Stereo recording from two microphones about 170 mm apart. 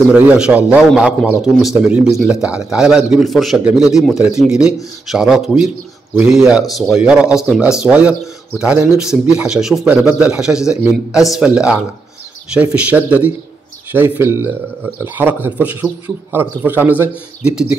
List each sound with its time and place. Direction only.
0.1 s a man's voice: 10° right (ahead or behind)